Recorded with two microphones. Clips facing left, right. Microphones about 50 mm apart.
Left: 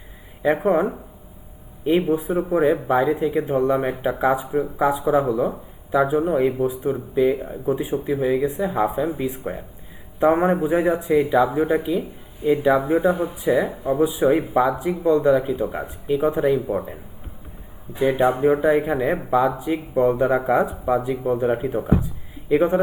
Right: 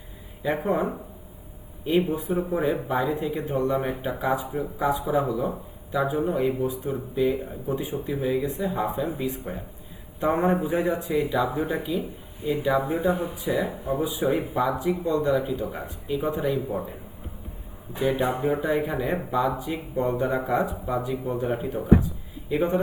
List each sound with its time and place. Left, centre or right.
0.4 s speech: left